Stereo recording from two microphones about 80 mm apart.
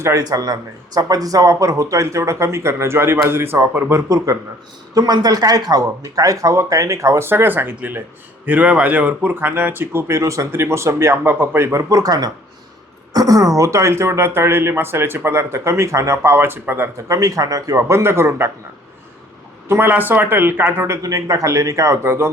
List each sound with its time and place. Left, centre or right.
0.0 s speech: right
4.3 s speech: right
7.3 s speech: right
17.1 s speech: right
19.6 s speech: right